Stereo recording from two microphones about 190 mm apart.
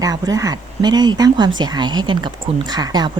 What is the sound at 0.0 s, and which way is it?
Speech, 20° right (ahead or behind).